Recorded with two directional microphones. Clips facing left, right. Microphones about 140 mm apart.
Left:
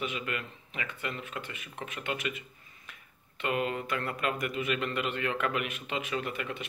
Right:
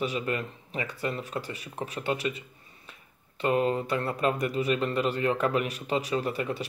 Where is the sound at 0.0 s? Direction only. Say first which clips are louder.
Right 6 dB; 35° right (ahead or behind).